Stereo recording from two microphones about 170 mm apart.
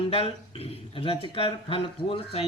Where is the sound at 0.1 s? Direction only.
35° left (ahead or behind).